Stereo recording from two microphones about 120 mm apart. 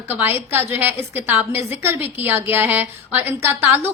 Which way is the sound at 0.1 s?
20° right (ahead or behind).